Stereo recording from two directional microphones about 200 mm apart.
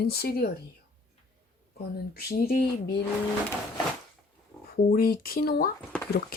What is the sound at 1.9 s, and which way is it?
Speech, 50° left (ahead or behind).